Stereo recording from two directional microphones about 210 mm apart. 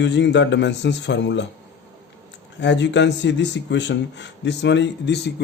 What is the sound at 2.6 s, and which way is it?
Speech, 55° left (ahead or behind).